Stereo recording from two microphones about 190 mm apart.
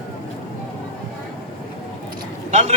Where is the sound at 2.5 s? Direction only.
35° right (ahead or behind).